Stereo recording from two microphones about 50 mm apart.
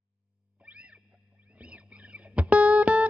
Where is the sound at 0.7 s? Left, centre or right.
Right.